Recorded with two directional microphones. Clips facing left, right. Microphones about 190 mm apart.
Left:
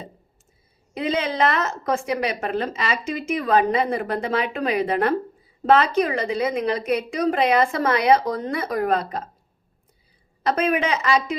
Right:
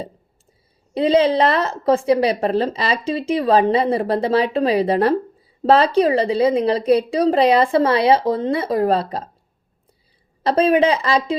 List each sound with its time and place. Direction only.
0.9 s a woman's voice: 30° right (ahead or behind)
10.4 s a woman's voice: 30° right (ahead or behind)